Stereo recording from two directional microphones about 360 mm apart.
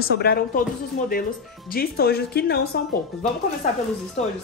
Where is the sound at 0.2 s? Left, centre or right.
Left.